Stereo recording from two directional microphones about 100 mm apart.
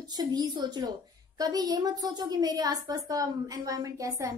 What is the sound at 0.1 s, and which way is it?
A woman's voice, 40° right (ahead or behind).